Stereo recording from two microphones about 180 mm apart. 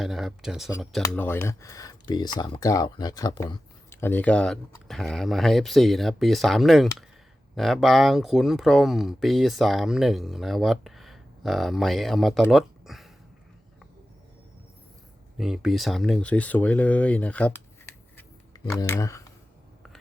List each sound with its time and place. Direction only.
0.0 s speech: centre (ahead or behind)
1.0 s speech: 10° left (ahead or behind)
15.4 s speech: centre (ahead or behind)
18.2 s a sound: 20° left (ahead or behind)
18.8 s speech: 20° left (ahead or behind)